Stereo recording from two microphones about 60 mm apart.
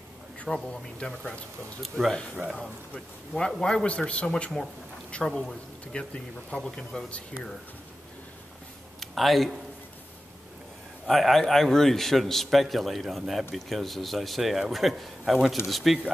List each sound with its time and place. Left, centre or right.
0.5 s a man's voice: centre
2.3 s speech: centre
3.3 s speech: centre
9.0 s speech: centre
11.1 s a man's voice: centre